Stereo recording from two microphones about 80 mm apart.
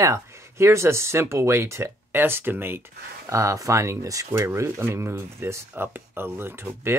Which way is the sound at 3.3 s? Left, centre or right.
Right.